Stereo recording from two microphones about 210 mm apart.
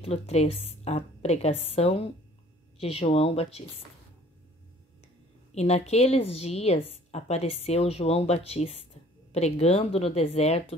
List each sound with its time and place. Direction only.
0.0 s a woman's voice: 30° left (ahead or behind)
5.5 s a woman's voice: 30° left (ahead or behind)